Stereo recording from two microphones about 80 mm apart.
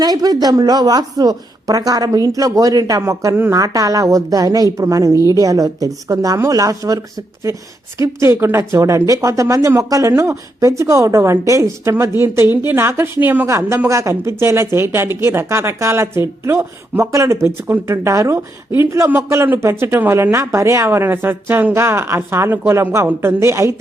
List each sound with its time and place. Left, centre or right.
0.0 s a woman's voice: right
13.5 s speech: right